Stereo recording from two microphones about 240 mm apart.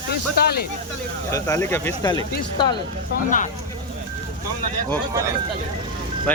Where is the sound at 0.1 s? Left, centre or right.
Left.